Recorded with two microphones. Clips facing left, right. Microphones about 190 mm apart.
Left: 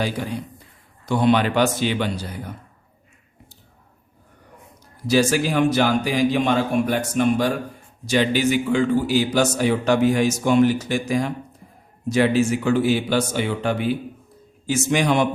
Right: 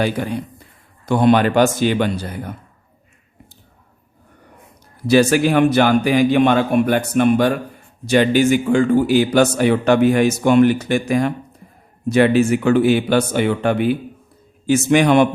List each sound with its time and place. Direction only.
0.0 s a man's voice: 60° right (ahead or behind)
5.0 s a man's voice: 60° right (ahead or behind)